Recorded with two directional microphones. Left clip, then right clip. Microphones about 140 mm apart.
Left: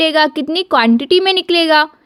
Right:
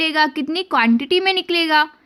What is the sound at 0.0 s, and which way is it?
A woman's voice, 25° left (ahead or behind).